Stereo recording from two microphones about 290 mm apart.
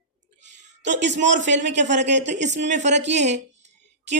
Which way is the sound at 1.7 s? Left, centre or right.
Right.